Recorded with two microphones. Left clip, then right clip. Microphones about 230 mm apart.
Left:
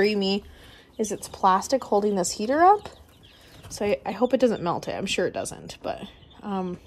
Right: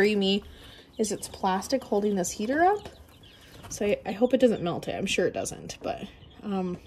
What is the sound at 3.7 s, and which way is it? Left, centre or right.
A woman's voice, centre.